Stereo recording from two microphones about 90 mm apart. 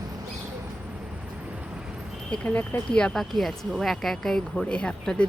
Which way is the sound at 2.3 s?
15° left (ahead or behind).